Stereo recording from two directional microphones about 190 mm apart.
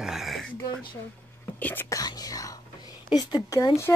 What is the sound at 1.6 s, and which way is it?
Speech, 10° left (ahead or behind).